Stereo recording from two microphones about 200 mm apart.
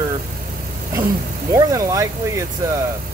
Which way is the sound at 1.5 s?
15° right (ahead or behind).